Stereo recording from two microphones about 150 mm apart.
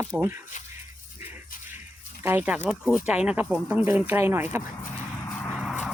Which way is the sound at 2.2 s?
10° right (ahead or behind).